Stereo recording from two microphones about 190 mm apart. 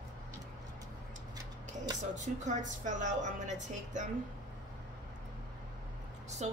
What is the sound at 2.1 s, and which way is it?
A woman's voice, 40° right (ahead or behind).